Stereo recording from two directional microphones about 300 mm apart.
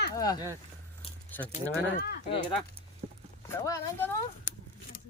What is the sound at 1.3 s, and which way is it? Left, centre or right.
Speech, centre.